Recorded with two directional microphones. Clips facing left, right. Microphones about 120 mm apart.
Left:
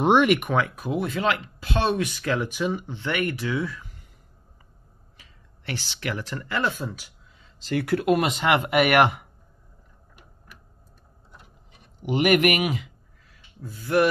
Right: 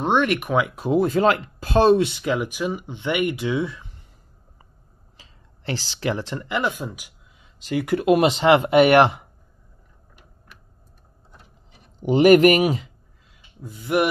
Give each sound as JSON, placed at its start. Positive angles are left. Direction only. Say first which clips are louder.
{"t": 0.0, "sound": "speech", "louder": "left 2 dB", "side_deg": 10}
{"t": 0.4, "sound": "speech", "louder": "right 2 dB", "side_deg": -10}
{"t": 0.7, "sound": "speech", "louder": "right 8 dB", "side_deg": -30}
{"t": 3.0, "sound": "speech", "louder": "right 6 dB", "side_deg": -20}
{"t": 5.1, "sound": "speech", "louder": "right 4 dB", "side_deg": -30}
{"t": 12.0, "sound": "speech", "louder": "right 7 dB", "side_deg": -30}
{"t": 13.3, "sound": "a sound", "louder": "right 1 dB", "side_deg": -20}